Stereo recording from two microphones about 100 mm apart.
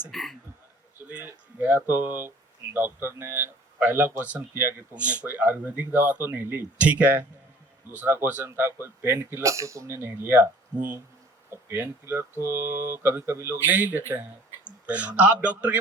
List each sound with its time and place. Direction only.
0.1 s speech: centre (ahead or behind)
1.0 s speech: 15° right (ahead or behind)
9.4 s speech: 30° right (ahead or behind); by 15.8 s 15° right (ahead or behind)